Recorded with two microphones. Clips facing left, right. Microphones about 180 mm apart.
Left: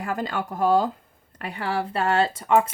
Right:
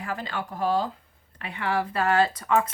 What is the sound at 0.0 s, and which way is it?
Speech, 45° left (ahead or behind).